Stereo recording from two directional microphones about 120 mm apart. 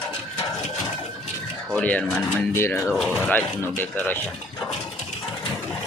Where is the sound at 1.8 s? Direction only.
10° left (ahead or behind).